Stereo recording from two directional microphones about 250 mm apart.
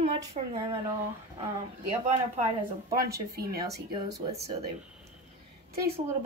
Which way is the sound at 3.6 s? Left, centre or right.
Right.